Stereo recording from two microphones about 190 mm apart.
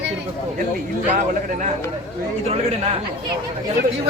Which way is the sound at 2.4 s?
35° right (ahead or behind).